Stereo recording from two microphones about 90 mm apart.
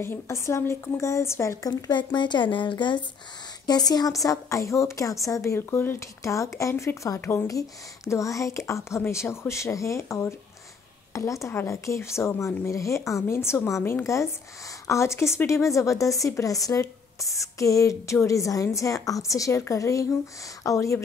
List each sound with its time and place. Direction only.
0.0 s speech: 30° left (ahead or behind)
1.7 s speech: 50° left (ahead or behind)
3.6 s speech: 50° left (ahead or behind)